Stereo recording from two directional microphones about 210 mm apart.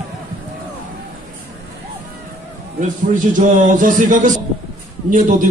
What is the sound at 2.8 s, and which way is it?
A man's voice, 40° right (ahead or behind).